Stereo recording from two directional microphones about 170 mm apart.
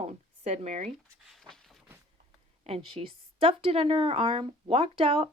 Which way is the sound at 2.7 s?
35° right (ahead or behind).